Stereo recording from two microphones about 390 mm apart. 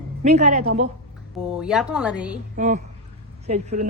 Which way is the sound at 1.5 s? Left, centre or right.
Centre.